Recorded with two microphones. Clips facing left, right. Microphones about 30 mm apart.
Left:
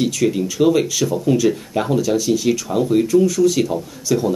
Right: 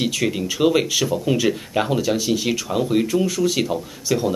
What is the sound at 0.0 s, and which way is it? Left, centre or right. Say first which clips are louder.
Speech: left 4 dB; right.